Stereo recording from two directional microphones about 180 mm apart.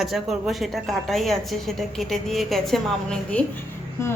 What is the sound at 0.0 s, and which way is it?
A woman's voice, centre (ahead or behind).